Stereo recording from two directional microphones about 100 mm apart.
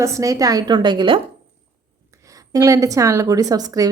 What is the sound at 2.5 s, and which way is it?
A woman's voice, 35° right (ahead or behind).